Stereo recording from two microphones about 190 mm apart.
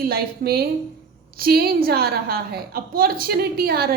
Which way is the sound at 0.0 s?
55° right (ahead or behind).